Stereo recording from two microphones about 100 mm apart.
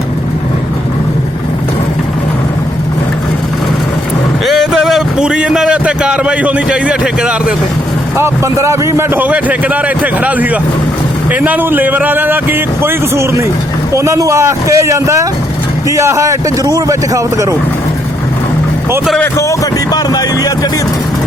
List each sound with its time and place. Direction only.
4.4 s a man's voice: centre (ahead or behind)
8.1 s a man's voice: 30° right (ahead or behind)
19.2 s a man's voice: 30° left (ahead or behind)